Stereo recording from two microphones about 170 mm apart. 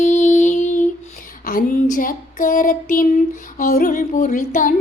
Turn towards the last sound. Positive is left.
turn(degrees=50)  # may be behind; listen again after turning